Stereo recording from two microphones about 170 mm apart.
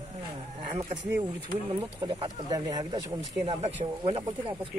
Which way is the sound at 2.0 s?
25° right (ahead or behind).